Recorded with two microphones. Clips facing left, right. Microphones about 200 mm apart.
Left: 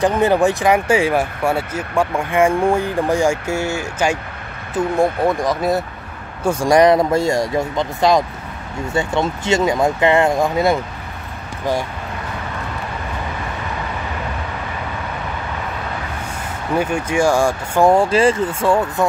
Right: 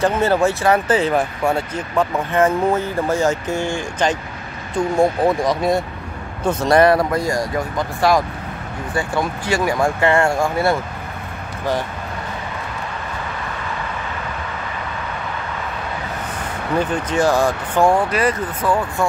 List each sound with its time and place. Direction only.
0.0 s speech: 15° left (ahead or behind)
16.7 s speech: 10° left (ahead or behind)
17.9 s speech: 25° left (ahead or behind)